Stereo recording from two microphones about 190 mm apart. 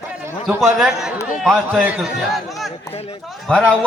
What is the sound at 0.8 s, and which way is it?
A man's voice, 5° right (ahead or behind).